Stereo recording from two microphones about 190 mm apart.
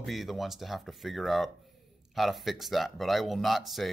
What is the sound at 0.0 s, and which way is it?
Speech, centre (ahead or behind).